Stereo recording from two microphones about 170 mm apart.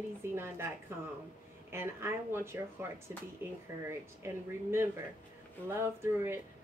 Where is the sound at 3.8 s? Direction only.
15° right (ahead or behind).